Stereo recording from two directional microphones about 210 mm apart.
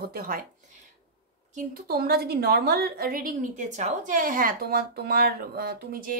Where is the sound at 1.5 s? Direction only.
40° right (ahead or behind).